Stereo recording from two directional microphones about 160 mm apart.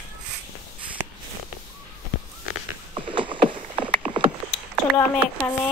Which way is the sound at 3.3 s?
30° right (ahead or behind).